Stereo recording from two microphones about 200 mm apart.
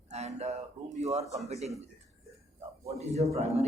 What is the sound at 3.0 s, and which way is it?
Speech, 30° right (ahead or behind).